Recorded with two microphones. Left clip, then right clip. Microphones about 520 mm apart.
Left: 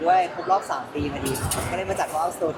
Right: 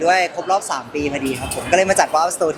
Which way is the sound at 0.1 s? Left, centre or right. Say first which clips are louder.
Even; right.